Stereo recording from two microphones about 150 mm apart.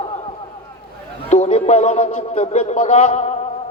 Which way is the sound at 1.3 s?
50° left (ahead or behind).